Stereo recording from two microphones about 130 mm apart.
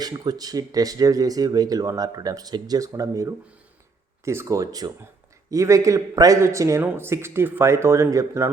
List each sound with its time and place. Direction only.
0.0 s speech: 30° right (ahead or behind)